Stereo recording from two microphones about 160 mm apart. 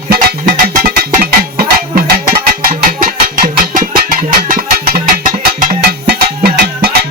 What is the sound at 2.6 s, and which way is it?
Music, 60° right (ahead or behind).